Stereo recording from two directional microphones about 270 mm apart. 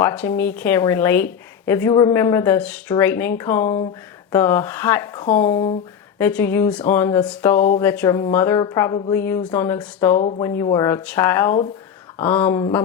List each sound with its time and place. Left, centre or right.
0.0 s speech: centre
10.2 s speech: left
10.4 s speech: centre